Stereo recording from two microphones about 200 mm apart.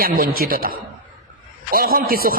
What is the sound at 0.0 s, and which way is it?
Speech, 45° right (ahead or behind).